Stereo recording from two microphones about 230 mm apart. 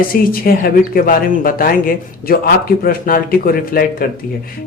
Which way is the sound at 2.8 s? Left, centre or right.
Left.